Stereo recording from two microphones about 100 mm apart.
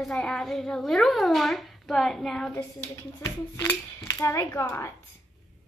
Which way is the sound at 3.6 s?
25° left (ahead or behind).